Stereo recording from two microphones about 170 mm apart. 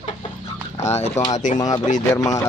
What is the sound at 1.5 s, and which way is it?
Speech, 20° left (ahead or behind).